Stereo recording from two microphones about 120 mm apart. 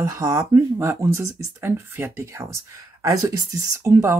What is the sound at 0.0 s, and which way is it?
Speech, 30° right (ahead or behind).